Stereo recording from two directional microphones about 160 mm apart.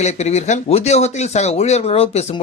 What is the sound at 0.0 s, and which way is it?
Speech, 45° left (ahead or behind).